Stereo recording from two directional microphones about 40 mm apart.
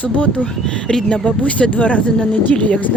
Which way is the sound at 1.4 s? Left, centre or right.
Left.